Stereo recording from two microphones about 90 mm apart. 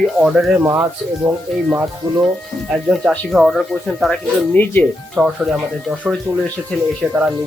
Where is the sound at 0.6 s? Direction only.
25° right (ahead or behind).